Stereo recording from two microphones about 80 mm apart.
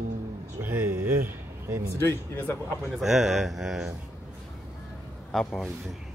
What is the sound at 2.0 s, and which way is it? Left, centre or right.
Speech, left.